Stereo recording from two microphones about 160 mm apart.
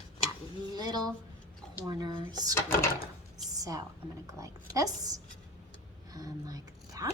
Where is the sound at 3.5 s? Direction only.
20° right (ahead or behind).